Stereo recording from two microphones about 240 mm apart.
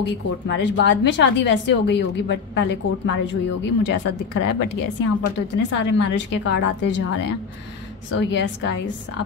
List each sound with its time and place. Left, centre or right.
0.5 s speech: left